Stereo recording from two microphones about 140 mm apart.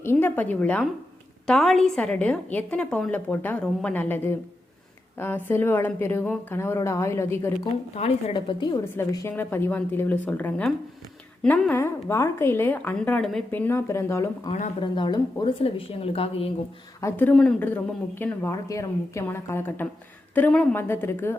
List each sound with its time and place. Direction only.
0.0 s speech: 15° left (ahead or behind)
7.9 s a woman's voice: 45° left (ahead or behind)
9.3 s speech: 15° left (ahead or behind)
14.8 s a woman's voice: 35° left (ahead or behind)
17.0 s speech: 15° left (ahead or behind)